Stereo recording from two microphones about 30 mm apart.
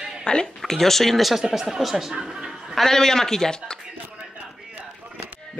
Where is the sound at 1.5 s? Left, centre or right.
Centre.